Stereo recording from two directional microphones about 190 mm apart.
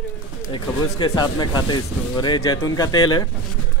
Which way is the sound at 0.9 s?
20° left (ahead or behind).